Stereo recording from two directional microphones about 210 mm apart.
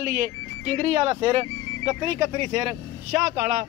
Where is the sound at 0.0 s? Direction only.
45° right (ahead or behind).